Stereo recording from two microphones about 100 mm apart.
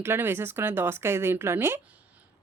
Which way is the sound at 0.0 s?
25° right (ahead or behind).